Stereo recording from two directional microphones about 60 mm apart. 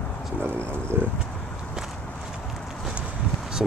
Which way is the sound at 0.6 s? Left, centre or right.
Right.